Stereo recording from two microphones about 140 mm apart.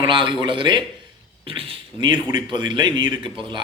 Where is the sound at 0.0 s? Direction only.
35° right (ahead or behind).